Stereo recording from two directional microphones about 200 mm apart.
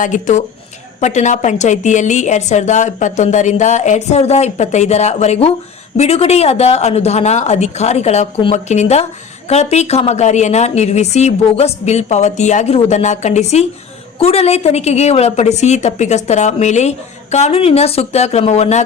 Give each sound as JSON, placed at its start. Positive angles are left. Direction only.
{"t": 0.0, "sound": "a woman's voice", "side_deg": 40}